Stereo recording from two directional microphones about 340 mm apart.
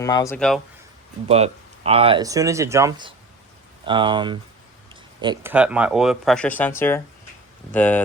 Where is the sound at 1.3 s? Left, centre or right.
Centre.